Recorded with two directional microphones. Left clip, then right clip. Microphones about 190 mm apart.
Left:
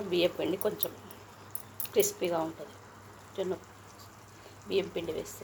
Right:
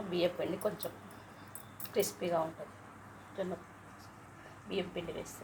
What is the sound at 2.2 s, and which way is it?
Speech, 25° left (ahead or behind).